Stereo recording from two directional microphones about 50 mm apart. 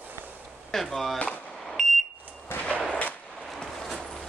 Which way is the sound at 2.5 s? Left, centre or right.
Left.